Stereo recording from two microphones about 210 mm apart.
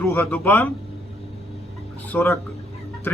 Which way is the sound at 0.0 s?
10° left (ahead or behind).